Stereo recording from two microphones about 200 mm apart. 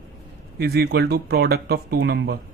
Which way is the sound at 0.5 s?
50° right (ahead or behind).